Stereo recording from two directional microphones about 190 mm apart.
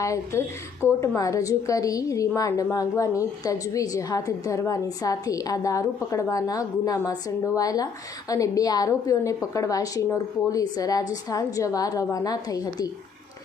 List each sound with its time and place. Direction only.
0.0 s a woman's voice: 15° left (ahead or behind)